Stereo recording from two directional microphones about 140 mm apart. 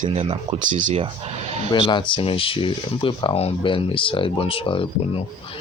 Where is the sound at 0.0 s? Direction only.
55° right (ahead or behind).